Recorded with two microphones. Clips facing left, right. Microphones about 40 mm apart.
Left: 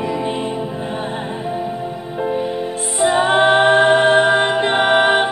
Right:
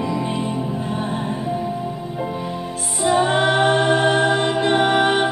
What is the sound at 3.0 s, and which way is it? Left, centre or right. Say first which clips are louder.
Music: left 3 dB; left.